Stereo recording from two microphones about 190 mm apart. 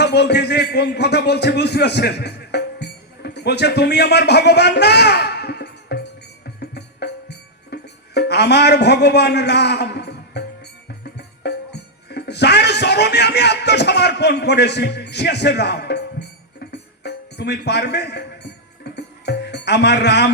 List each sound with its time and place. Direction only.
0.0 s a man's voice: 60° left (ahead or behind)
6.6 s music: 60° left (ahead or behind)
11.2 s speech: 60° left (ahead or behind)
18.8 s music: 60° left (ahead or behind)